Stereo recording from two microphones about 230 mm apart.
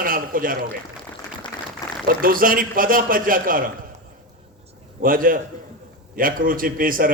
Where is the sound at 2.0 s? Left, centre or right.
Right.